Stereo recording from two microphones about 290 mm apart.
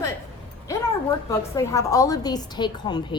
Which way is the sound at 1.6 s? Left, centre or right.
Centre.